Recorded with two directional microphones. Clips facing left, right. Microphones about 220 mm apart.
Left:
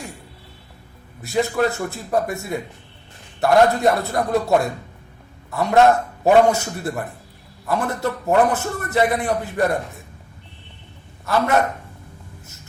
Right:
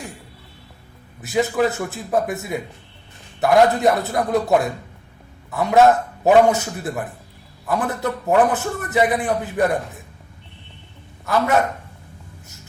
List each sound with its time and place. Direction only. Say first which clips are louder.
1.2 s a man's voice: right 1 dB; 5° right (ahead or behind)
11.3 s a man's voice: even; centre (ahead or behind)